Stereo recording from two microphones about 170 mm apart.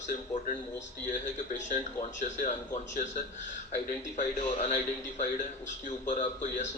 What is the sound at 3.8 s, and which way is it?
A man's voice, 45° left (ahead or behind).